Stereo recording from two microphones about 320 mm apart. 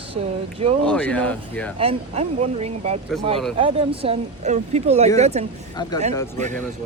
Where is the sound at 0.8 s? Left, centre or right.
Centre.